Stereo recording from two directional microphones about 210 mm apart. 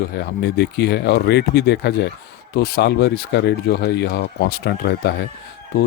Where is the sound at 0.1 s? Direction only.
50° left (ahead or behind).